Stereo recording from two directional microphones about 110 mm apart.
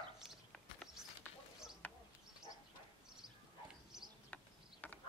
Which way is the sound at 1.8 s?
15° left (ahead or behind).